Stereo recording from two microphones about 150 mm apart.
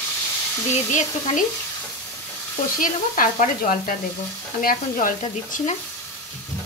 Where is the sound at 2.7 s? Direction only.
65° left (ahead or behind).